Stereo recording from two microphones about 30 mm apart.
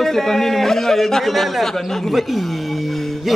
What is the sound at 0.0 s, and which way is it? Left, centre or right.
A man's voice, centre.